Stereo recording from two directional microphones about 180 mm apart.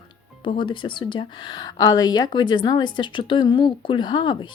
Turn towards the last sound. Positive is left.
turn(degrees=25)  # may be behind; listen again after turning